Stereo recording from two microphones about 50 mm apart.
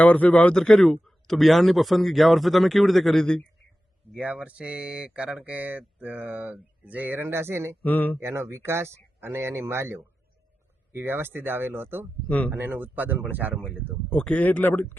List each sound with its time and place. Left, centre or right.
0.0 s speech: left; by 3.2 s centre
4.2 s speech: right
7.9 s speech: left
8.2 s speech: right
14.1 s speech: left
14.6 s speech: left